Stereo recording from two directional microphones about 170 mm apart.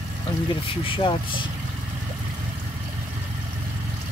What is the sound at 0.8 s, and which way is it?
Speech, 30° left (ahead or behind).